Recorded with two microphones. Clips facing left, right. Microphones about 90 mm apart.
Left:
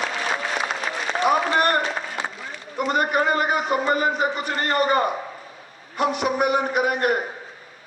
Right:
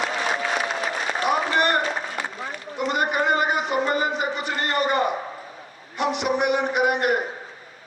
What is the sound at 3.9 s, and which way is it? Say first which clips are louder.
A man's voice: left 2 dB; 45° left (ahead or behind).